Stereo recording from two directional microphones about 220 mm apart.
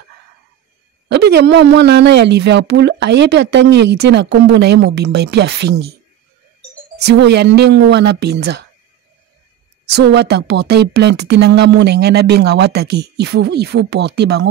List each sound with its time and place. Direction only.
1.0 s speech: 50° right (ahead or behind)
7.0 s speech: 50° right (ahead or behind)
9.9 s speech: 50° right (ahead or behind)